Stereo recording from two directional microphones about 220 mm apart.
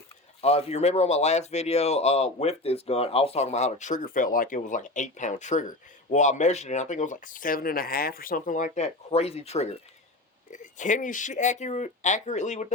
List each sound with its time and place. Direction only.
0.4 s speech: 30° left (ahead or behind)